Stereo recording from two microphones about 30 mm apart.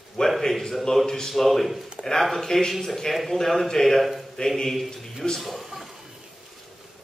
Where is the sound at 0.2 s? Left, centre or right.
Left.